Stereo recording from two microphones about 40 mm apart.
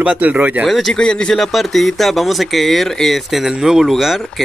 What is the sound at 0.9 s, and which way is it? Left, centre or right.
Speech, left.